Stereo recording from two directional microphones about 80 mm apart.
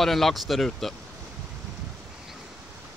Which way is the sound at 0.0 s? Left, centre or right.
Centre.